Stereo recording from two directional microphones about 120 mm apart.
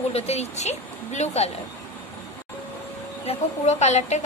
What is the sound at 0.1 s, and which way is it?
Speech, 60° left (ahead or behind).